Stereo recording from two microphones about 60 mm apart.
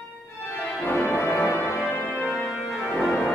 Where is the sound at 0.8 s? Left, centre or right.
Left.